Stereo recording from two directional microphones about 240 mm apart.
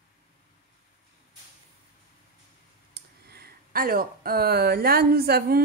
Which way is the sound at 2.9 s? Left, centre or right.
Right.